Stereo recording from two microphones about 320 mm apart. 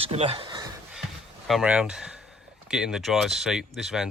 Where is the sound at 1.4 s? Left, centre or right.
Centre.